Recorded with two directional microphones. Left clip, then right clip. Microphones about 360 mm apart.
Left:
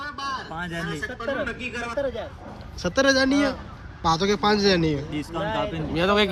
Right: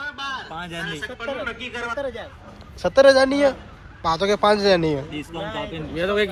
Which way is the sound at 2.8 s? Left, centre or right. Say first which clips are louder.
Right 6 dB; centre.